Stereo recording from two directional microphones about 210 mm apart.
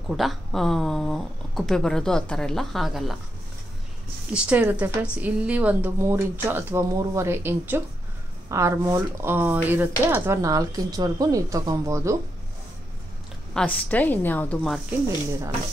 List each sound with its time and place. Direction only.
0.1 s speech: centre (ahead or behind)
4.3 s speech: 5° right (ahead or behind)
13.5 s a woman's voice: 5° left (ahead or behind)